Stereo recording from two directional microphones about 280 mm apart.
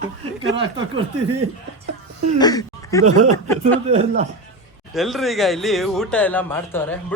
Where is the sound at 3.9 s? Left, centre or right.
Right.